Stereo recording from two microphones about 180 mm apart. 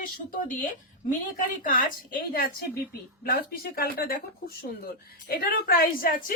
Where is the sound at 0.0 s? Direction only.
50° left (ahead or behind).